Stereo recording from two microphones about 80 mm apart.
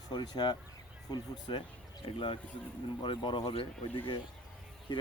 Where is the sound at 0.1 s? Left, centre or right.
Left.